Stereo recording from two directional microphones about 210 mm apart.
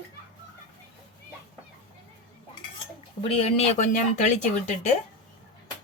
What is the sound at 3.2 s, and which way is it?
Speech, 30° left (ahead or behind).